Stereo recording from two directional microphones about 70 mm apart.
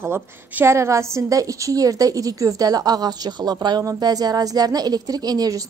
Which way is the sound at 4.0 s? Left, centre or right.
Right.